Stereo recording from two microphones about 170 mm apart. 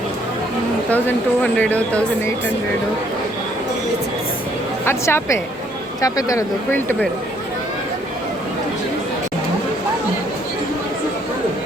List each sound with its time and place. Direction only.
0.9 s speech: 10° left (ahead or behind)
4.9 s speech: 15° left (ahead or behind)